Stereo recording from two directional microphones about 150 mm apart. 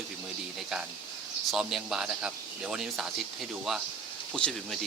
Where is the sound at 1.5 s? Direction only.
5° right (ahead or behind).